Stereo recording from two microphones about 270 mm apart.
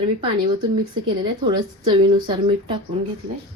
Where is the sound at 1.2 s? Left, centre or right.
Centre.